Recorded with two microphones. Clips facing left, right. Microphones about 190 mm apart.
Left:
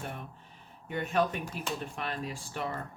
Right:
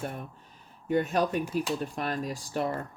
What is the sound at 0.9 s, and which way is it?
Speech, 40° right (ahead or behind).